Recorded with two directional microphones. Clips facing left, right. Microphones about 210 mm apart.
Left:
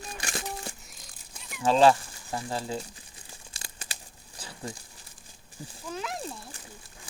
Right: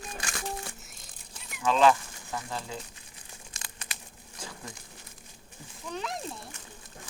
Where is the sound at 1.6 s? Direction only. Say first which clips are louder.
Left 2 dB; 35° left (ahead or behind).